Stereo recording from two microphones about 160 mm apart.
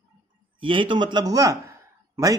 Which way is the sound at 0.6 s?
30° right (ahead or behind).